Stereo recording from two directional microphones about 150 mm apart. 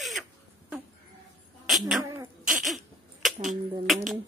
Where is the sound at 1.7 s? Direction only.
Centre (ahead or behind).